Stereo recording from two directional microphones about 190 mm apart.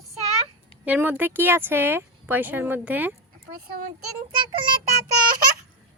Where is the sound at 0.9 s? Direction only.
10° right (ahead or behind).